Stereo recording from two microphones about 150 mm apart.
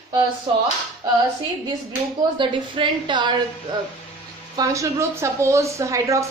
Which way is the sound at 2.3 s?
35° right (ahead or behind).